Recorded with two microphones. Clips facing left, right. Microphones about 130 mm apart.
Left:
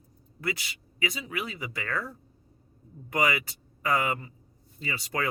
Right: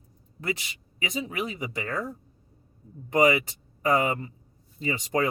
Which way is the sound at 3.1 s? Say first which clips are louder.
Right 6 dB; 25° right (ahead or behind).